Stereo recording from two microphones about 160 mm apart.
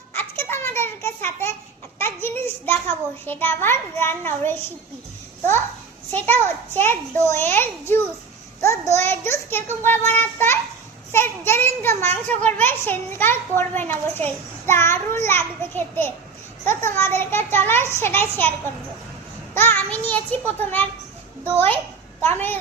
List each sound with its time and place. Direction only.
0.1 s children playing: 15° left (ahead or behind)
2.0 s child singing: 15° left (ahead or behind)
3.2 s a child's voice: 15° left (ahead or behind)
6.1 s a child's voice: 10° left (ahead or behind)
19.5 s a child's voice: 10° left (ahead or behind)
22.2 s a child's voice: 10° left (ahead or behind)